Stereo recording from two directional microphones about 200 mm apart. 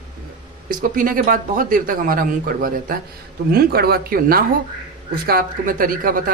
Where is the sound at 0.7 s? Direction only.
45° right (ahead or behind).